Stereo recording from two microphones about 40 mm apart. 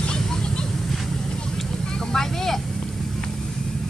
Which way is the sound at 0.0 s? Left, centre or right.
Centre.